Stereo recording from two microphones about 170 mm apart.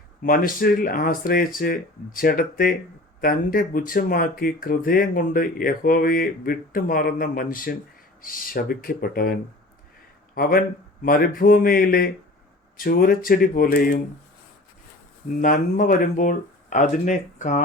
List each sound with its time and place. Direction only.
0.2 s speech: 55° left (ahead or behind)
15.4 s speech: 50° left (ahead or behind)